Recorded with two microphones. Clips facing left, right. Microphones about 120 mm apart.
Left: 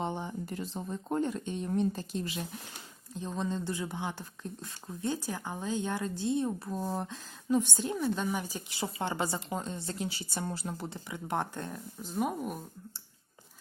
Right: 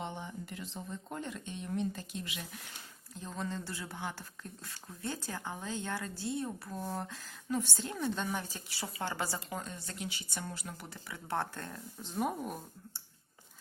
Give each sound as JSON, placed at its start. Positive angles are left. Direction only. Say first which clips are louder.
{"t": 0.0, "sound": "speech", "louder": "left 6 dB", "side_deg": 35}
{"t": 3.2, "sound": "speech", "louder": "left 5 dB", "side_deg": 20}
{"t": 12.0, "sound": "speech", "louder": "left 2 dB", "side_deg": 0}